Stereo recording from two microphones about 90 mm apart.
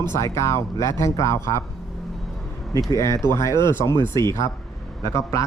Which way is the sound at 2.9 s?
35° left (ahead or behind).